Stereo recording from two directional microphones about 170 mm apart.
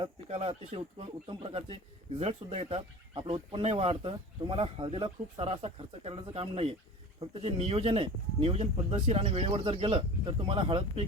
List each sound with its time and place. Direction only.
0.0 s speech: 40° right (ahead or behind)